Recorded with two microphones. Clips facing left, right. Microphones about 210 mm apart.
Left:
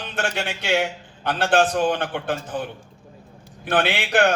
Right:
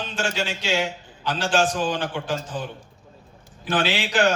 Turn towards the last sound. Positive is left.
turn(degrees=60)  # may be behind; listen again after turning